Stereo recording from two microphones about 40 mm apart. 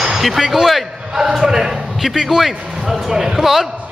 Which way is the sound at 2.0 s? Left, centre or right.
Centre.